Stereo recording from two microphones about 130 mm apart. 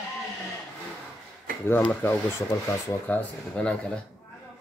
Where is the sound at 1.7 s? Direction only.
15° left (ahead or behind).